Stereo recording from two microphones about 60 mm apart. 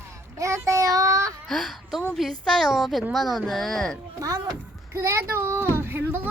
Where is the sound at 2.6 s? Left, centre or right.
Centre.